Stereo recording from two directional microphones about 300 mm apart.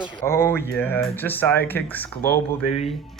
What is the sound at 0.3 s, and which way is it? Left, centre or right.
Speech, centre.